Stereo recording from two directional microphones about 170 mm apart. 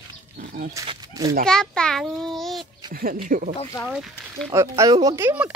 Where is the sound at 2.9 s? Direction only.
55° right (ahead or behind).